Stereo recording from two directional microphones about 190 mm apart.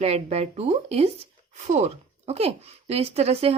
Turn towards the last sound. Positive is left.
turn(degrees=-35)  # may be behind; listen again after turning